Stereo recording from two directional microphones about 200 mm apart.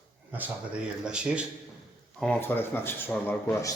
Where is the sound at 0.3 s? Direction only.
10° right (ahead or behind).